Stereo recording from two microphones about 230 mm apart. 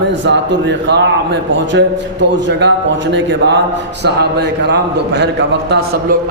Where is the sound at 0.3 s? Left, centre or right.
Right.